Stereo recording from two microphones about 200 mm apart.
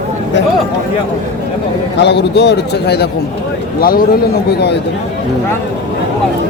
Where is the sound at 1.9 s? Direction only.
60° left (ahead or behind).